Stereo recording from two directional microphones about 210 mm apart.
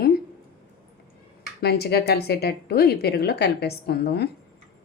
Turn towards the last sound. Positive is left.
turn(degrees=50)  # may be behind; listen again after turning